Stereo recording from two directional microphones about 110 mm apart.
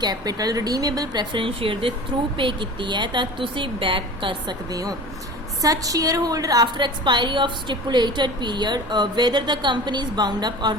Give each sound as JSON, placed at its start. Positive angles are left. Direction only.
{"t": 0.0, "sound": "a woman's voice", "side_deg": -35}
{"t": 4.7, "sound": "a woman's voice", "side_deg": -35}